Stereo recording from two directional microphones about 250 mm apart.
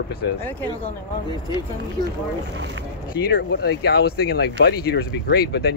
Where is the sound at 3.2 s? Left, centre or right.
Left.